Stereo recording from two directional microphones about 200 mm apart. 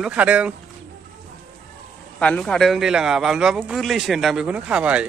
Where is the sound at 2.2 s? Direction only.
5° left (ahead or behind).